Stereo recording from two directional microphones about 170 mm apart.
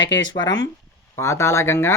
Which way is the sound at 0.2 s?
25° left (ahead or behind).